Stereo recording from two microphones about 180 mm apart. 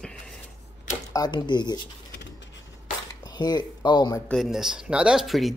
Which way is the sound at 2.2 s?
80° left.